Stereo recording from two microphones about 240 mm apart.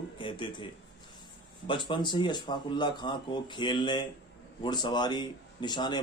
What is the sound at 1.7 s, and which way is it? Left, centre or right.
Speech, centre.